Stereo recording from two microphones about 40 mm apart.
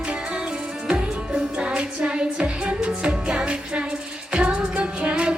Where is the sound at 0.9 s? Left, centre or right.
Right.